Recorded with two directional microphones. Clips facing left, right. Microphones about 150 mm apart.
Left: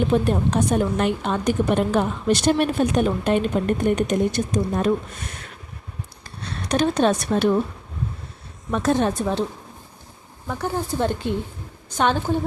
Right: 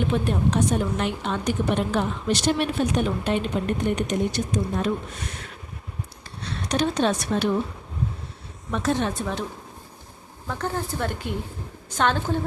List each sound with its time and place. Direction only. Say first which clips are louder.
0.1 s a woman's voice: left 3 dB; 45° left (ahead or behind)
6.2 s a sound: left 1 dB; 50° left (ahead or behind)
8.7 s a woman's voice: left 4 dB; 45° left (ahead or behind)
10.4 s speech: left 2 dB; 10° left (ahead or behind)
10.9 s a woman's voice: left 6 dB; 25° left (ahead or behind)
11.9 s a woman's voice: left 2 dB; 10° left (ahead or behind)